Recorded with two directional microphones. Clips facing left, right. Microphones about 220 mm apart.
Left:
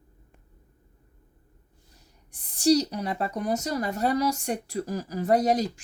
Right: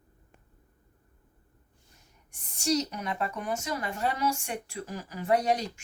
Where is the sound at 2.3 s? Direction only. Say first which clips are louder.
Left 8 dB; 35° left (ahead or behind).